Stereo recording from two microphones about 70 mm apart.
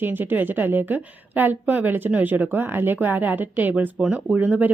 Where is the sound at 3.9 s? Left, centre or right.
Centre.